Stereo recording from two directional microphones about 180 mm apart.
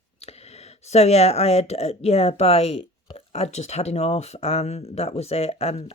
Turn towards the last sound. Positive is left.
turn(degrees=35)  # may be behind; listen again after turning